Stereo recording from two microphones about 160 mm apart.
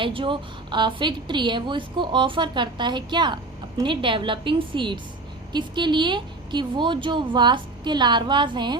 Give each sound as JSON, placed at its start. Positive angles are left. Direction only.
{"t": 0.0, "sound": "a woman's voice", "side_deg": -30}